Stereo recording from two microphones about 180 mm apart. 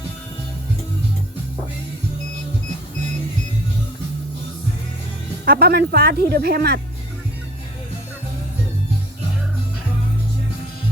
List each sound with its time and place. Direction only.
5.5 s speech: 60° right (ahead or behind)